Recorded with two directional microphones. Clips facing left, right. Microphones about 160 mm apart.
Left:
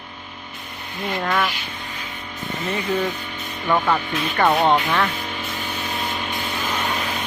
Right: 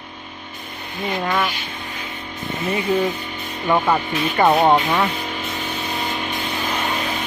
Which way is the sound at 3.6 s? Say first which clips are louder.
Right 2 dB; 15° right (ahead or behind).